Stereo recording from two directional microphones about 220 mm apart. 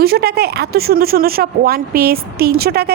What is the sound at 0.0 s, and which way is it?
A woman's voice, 45° right (ahead or behind).